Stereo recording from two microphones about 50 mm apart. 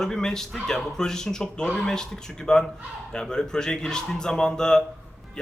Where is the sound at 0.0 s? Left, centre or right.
Centre.